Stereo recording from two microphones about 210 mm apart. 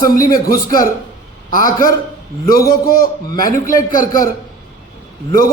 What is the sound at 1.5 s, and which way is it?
A man's voice, 40° left (ahead or behind).